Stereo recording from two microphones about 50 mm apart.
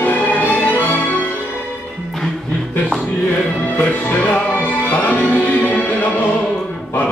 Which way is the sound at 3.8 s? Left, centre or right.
Left.